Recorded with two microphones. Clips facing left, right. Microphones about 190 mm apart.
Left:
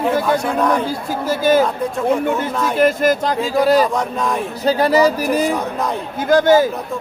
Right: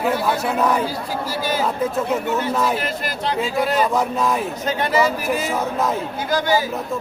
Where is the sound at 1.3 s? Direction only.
50° left (ahead or behind).